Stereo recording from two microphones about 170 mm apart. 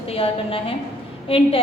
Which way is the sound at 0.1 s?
35° left (ahead or behind).